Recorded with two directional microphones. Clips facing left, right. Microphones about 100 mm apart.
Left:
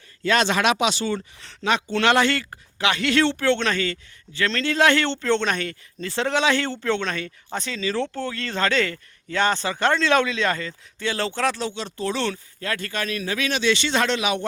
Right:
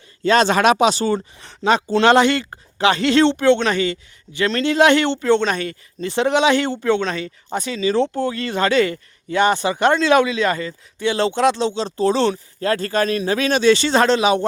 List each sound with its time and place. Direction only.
0.2 s speech: 30° right (ahead or behind)
0.4 s speech: 40° right (ahead or behind)
1.4 s speech: 30° right (ahead or behind)
2.5 s speech: 35° right (ahead or behind)